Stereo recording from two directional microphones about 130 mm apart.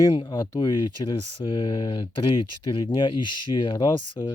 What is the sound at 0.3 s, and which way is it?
Speech, 30° left (ahead or behind).